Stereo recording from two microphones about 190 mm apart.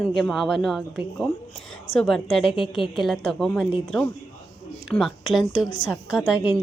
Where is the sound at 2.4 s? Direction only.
30° left (ahead or behind).